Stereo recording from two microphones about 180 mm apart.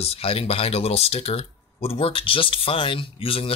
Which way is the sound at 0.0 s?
35° left (ahead or behind).